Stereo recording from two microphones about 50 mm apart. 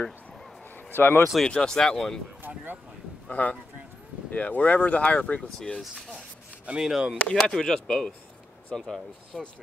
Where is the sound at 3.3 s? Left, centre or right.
Left.